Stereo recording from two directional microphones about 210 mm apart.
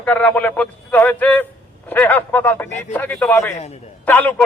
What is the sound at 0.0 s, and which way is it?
A man's voice, 5° left (ahead or behind).